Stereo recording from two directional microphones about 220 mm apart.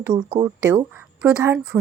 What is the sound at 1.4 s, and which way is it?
Speech, 10° right (ahead or behind).